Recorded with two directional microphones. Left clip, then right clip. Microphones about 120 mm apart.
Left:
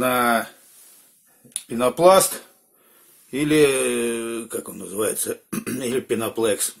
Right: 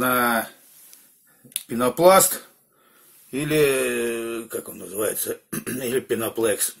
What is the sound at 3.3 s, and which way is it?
Speech, 20° left (ahead or behind).